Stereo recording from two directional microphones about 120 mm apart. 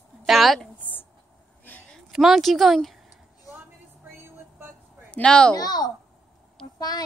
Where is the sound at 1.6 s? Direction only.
15° left (ahead or behind).